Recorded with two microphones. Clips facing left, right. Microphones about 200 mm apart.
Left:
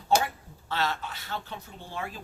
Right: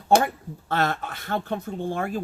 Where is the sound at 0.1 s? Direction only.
55° right (ahead or behind).